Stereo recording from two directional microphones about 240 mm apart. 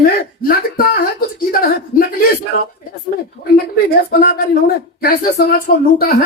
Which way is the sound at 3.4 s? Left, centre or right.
Left.